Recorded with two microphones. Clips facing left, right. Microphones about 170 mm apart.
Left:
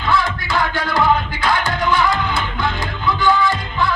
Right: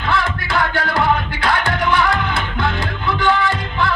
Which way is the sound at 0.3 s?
65° right (ahead or behind).